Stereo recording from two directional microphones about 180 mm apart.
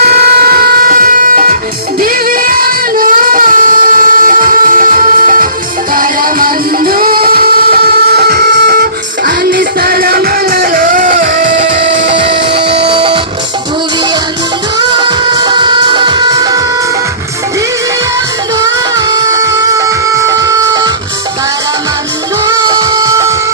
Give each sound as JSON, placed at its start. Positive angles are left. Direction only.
{"t": 0.1, "sound": "vehicle", "side_deg": -60}
{"t": 2.0, "sound": "a sound", "side_deg": -55}
{"t": 5.9, "sound": "music", "side_deg": -50}
{"t": 11.6, "sound": "music", "side_deg": -30}
{"t": 14.8, "sound": "music", "side_deg": -25}
{"t": 18.6, "sound": "music", "side_deg": -20}
{"t": 22.4, "sound": "music", "side_deg": -20}